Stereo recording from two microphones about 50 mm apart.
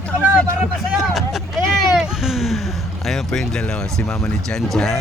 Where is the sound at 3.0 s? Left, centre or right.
Centre.